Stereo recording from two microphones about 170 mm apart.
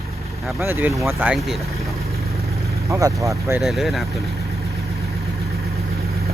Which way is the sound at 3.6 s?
Centre (ahead or behind).